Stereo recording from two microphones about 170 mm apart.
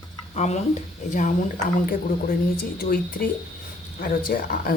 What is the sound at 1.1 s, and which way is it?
Speech, 45° left (ahead or behind).